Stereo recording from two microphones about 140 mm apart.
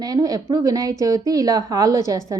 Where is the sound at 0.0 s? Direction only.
25° right (ahead or behind).